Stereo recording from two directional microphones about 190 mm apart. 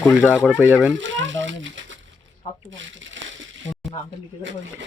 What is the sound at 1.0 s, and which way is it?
Speech, 75° right (ahead or behind).